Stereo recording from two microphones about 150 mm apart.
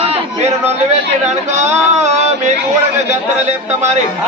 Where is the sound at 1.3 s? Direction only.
50° right (ahead or behind).